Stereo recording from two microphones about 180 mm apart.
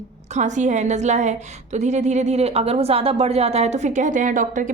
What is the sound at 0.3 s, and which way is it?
A woman's voice, 40° right (ahead or behind).